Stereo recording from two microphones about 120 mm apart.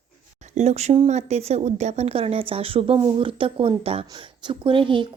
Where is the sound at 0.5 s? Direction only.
65° right (ahead or behind).